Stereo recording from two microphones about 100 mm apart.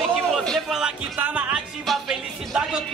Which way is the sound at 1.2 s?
15° right (ahead or behind).